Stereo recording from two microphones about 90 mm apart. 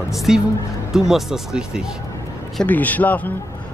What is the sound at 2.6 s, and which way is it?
Speech, 20° left (ahead or behind).